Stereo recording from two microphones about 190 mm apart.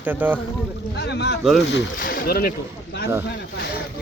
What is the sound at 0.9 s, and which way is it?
Speech, 65° left (ahead or behind).